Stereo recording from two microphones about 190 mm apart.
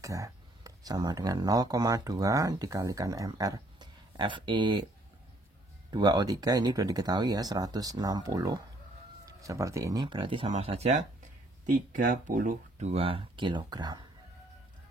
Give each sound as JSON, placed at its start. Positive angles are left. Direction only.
{"t": 0.0, "sound": "speech", "side_deg": -15}
{"t": 5.9, "sound": "speech", "side_deg": -20}
{"t": 12.3, "sound": "speech", "side_deg": -45}